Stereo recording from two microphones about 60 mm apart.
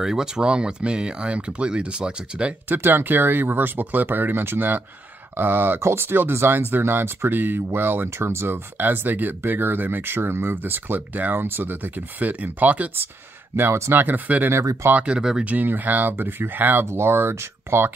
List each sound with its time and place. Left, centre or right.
0.0 s speech: centre
2.7 s speech: right
13.7 s speech: right
14.0 s speech: right
15.0 s speech: centre
15.5 s speech: right